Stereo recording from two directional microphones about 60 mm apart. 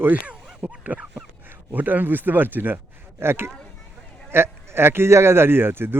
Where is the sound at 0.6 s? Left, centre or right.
Right.